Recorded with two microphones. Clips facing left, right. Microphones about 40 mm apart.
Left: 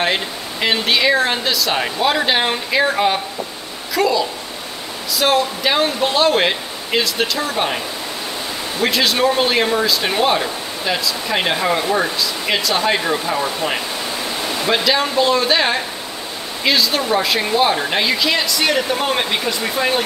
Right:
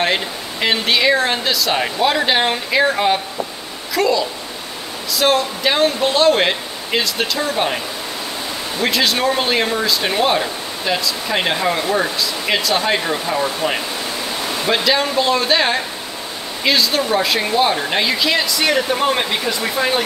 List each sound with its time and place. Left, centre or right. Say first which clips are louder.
0.0 s speech: right 1 dB; centre